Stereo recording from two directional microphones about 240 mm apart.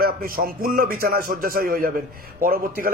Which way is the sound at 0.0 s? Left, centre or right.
Right.